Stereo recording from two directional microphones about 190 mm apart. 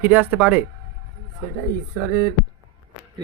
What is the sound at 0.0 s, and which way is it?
Speech, 10° right (ahead or behind).